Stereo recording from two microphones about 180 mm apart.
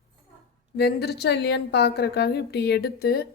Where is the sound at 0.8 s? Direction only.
65° left (ahead or behind).